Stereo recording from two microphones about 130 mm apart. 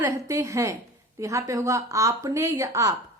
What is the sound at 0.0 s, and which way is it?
A woman's voice, 20° right (ahead or behind).